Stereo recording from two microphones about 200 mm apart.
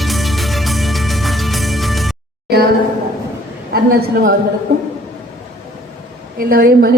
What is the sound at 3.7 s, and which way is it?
Speech, 50° right (ahead or behind).